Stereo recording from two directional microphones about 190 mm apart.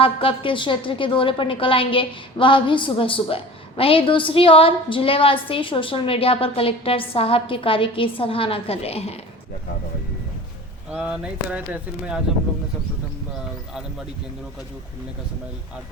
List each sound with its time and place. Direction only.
0.0 s a woman's voice: 30° left (ahead or behind)
10.9 s speech: 5° right (ahead or behind)